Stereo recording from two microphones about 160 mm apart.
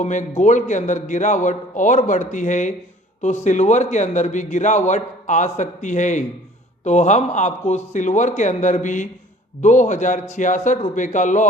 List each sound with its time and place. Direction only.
0.0 s a man's voice: 50° left (ahead or behind)